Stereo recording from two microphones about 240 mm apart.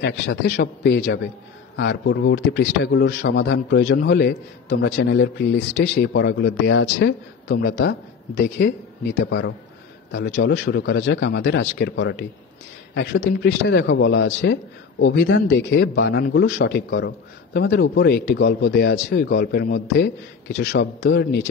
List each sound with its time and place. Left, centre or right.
0.0 s a man's voice: left